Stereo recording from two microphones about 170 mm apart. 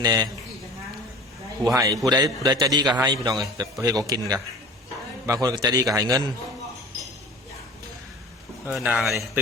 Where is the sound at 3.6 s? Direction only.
20° right (ahead or behind).